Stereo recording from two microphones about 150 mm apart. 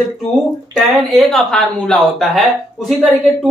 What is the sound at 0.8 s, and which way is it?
Speech, centre (ahead or behind).